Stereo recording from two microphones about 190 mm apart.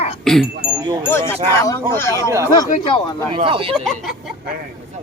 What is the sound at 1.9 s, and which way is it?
Speech, 15° left (ahead or behind).